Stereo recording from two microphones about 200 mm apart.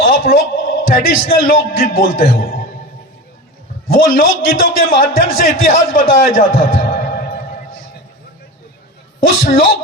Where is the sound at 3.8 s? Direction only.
45° left (ahead or behind).